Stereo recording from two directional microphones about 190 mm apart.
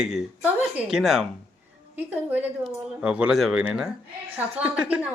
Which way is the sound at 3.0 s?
5° right (ahead or behind).